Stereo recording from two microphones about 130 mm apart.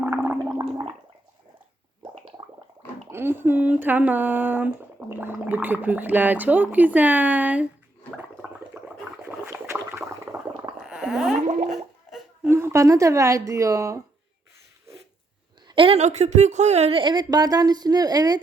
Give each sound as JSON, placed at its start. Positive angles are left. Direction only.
{"t": 0.0, "sound": "gargling", "side_deg": -15}
{"t": 0.6, "sound": "gargling", "side_deg": -40}
{"t": 3.1, "sound": "speech", "side_deg": -15}
{"t": 8.1, "sound": "gargling", "side_deg": -10}
{"t": 9.9, "sound": "a sound", "side_deg": -20}
{"t": 10.8, "sound": "a sound", "side_deg": 0}
{"t": 11.4, "sound": "plop", "side_deg": -65}
{"t": 12.5, "sound": "speech", "side_deg": -20}
{"t": 15.6, "sound": "a sound", "side_deg": -40}
{"t": 16.0, "sound": "speech", "side_deg": -60}
{"t": 17.0, "sound": "a woman's voice", "side_deg": -35}